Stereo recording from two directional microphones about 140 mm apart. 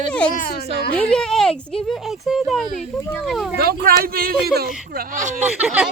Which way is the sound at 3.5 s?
90° right.